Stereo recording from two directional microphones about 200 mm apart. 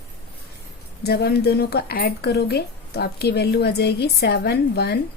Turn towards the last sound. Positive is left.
turn(degrees=55)  # may be behind; listen again after turning